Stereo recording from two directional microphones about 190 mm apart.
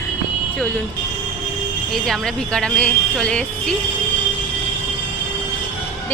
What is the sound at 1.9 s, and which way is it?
A woman's voice, centre (ahead or behind).